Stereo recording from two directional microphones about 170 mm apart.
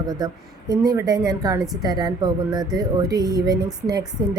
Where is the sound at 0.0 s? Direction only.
20° right (ahead or behind).